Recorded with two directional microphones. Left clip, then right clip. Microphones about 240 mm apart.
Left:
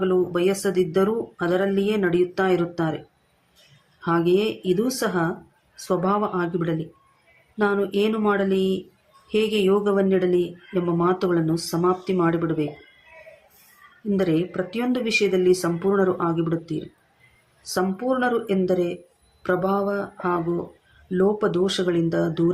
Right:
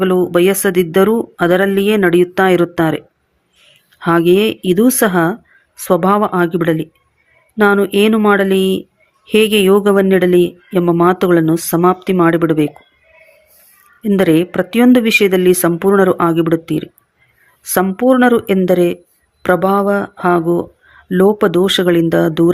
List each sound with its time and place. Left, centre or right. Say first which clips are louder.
0.0 s speech: right 9 dB; right
4.0 s speech: right 9 dB; right
14.2 s speech: right 11 dB; right